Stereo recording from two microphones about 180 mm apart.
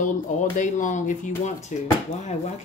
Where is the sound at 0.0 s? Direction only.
45° left (ahead or behind).